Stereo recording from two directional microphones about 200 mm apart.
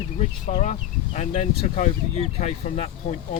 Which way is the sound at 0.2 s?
35° left (ahead or behind).